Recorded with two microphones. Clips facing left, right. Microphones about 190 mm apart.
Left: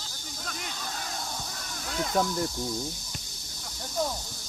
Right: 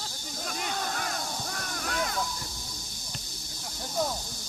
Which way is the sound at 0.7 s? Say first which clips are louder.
Right 8 dB; 65° right (ahead or behind).